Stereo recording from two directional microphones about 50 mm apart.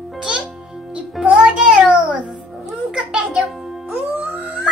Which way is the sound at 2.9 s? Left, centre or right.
Centre.